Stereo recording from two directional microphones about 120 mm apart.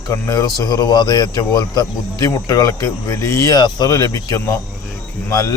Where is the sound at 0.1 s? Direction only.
30° left (ahead or behind).